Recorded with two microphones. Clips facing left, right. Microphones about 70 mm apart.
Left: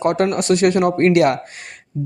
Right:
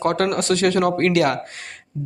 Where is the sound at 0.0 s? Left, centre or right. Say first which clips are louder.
Left 2 dB; centre.